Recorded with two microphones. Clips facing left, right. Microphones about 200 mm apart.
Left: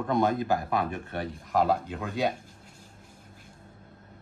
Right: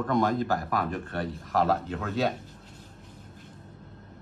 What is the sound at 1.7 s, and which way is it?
Speech, 15° left (ahead or behind).